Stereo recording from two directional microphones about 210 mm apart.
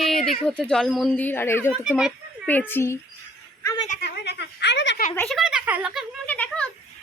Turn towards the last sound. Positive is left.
turn(degrees=5)  # may be behind; listen again after turning